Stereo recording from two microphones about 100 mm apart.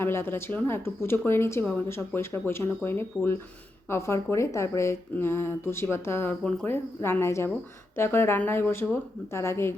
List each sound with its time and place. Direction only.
0.0 s a woman's voice: 25° left (ahead or behind)